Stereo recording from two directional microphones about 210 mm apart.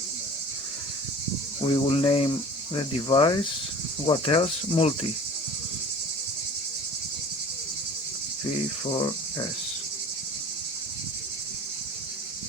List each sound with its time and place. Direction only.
1.6 s cricket: 25° left (ahead or behind)